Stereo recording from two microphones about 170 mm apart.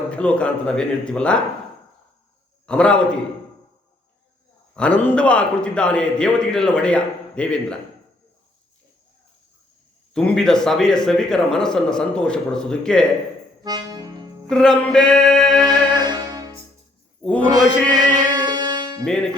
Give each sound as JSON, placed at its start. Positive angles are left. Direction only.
{"t": 0.1, "sound": "speech", "side_deg": 5}
{"t": 2.6, "sound": "a man's voice", "side_deg": 5}
{"t": 4.7, "sound": "a man's voice", "side_deg": 5}
{"t": 10.2, "sound": "a man's voice", "side_deg": 5}
{"t": 13.7, "sound": "music", "side_deg": -25}
{"t": 14.5, "sound": "a man's voice", "side_deg": 5}
{"t": 15.6, "sound": "music", "side_deg": -25}
{"t": 19.0, "sound": "a man's voice", "side_deg": 5}